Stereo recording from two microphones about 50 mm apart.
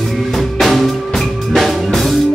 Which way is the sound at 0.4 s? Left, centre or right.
Centre.